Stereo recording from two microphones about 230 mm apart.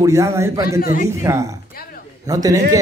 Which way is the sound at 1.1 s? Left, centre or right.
Centre.